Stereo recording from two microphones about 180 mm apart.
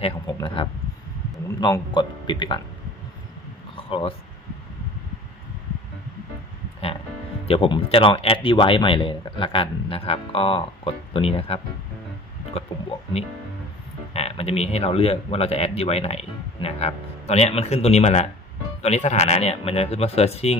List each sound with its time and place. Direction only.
0.0 s speech: 30° left (ahead or behind)
3.7 s a sound: 30° left (ahead or behind)
7.4 s speech: 30° left (ahead or behind)
14.1 s speech: 35° left (ahead or behind)